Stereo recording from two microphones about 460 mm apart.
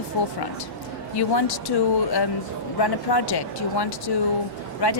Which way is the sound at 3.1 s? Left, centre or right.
Left.